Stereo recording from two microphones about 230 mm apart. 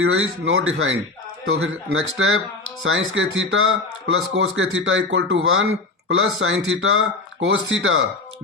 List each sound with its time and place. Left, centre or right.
0.0 s speech: right